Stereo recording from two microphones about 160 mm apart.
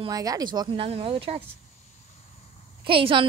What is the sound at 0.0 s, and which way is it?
Speech, 25° right (ahead or behind).